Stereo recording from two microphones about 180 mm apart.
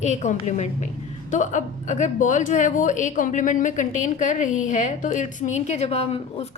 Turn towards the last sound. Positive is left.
turn(degrees=35)  # may be behind; listen again after turning